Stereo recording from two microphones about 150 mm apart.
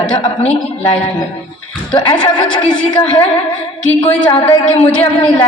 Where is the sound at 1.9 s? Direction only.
30° left (ahead or behind).